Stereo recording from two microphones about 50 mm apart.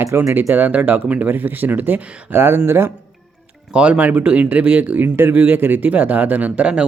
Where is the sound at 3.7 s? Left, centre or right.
Right.